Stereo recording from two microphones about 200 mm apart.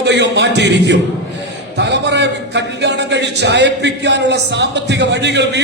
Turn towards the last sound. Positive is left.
turn(degrees=-60)  # may be behind; listen again after turning